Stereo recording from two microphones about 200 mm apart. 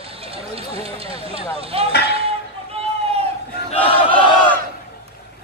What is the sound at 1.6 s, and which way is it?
Speech, 30° right (ahead or behind).